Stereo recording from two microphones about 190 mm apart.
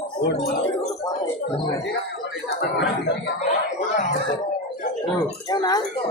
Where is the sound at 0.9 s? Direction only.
15° left (ahead or behind).